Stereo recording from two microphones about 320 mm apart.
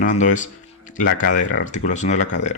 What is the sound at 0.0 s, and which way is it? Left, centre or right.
Speech, left.